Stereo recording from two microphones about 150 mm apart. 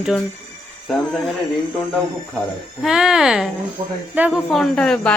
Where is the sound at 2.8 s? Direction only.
5° right (ahead or behind).